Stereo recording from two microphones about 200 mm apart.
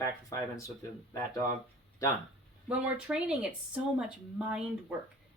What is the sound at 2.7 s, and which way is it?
Speech, 5° right (ahead or behind).